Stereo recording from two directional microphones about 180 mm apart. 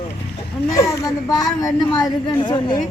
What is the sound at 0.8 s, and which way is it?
A child's voice, 20° left (ahead or behind).